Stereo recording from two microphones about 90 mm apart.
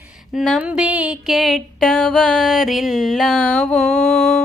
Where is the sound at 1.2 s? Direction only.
Centre (ahead or behind).